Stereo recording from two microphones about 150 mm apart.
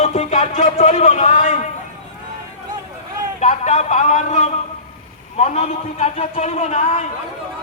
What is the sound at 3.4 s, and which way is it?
A man's voice, 50° left (ahead or behind).